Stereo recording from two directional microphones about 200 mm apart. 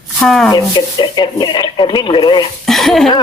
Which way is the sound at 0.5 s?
20° left (ahead or behind).